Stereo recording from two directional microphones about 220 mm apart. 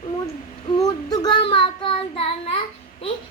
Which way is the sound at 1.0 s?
20° left (ahead or behind).